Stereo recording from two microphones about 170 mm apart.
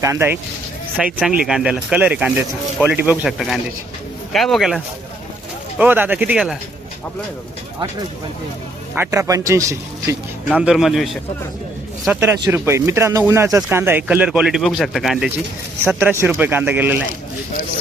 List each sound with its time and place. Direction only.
0.0 s speech: 15° right (ahead or behind); by 4.8 s centre (ahead or behind)
5.7 s speech: 10° right (ahead or behind)
9.0 s speech: 20° right (ahead or behind)
10.6 s speech: 5° right (ahead or behind)
12.2 s speech: 10° right (ahead or behind)
15.9 s speech: 10° right (ahead or behind)